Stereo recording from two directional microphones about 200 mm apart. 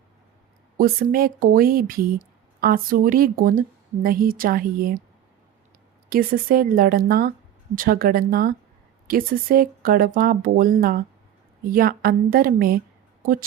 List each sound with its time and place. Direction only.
0.8 s speech: 45° right (ahead or behind)
6.1 s speech: 45° right (ahead or behind)